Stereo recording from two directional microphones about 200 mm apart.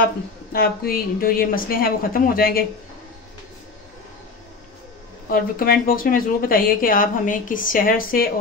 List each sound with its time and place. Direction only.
0.5 s speech: 50° left (ahead or behind)
5.3 s speech: 45° left (ahead or behind)